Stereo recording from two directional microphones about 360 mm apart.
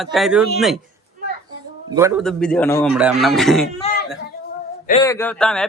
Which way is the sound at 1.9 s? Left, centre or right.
Centre.